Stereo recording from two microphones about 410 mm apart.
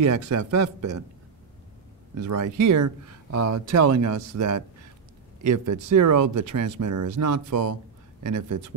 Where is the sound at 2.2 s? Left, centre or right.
Right.